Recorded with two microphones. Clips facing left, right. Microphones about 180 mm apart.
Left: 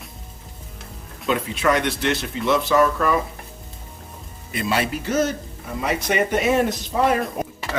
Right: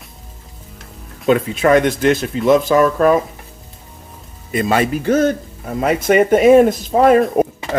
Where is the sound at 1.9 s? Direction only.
50° right (ahead or behind).